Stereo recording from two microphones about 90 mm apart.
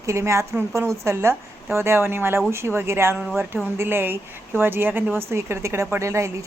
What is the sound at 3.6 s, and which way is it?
Speech, 25° right (ahead or behind).